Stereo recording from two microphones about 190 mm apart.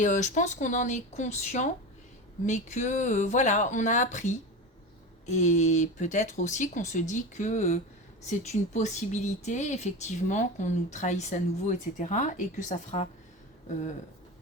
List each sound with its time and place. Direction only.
0.0 s speech: 40° left (ahead or behind)